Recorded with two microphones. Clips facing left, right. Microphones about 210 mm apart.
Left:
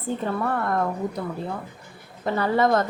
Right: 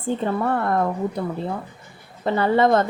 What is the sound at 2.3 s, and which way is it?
Speech, 25° right (ahead or behind).